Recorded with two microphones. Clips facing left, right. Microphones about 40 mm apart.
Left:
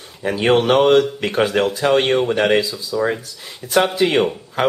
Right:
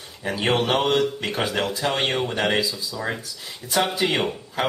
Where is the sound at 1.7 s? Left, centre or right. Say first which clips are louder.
Left 9 dB; left.